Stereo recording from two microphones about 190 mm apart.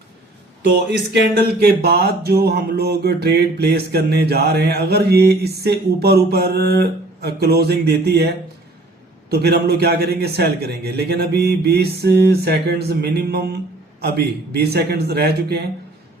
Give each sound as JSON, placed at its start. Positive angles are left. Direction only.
{"t": 0.9, "sound": "speech", "side_deg": -55}
{"t": 9.3, "sound": "speech", "side_deg": -55}